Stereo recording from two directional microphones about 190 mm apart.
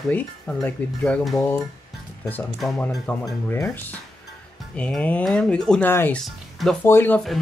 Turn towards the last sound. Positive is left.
turn(degrees=10)  # may be behind; listen again after turning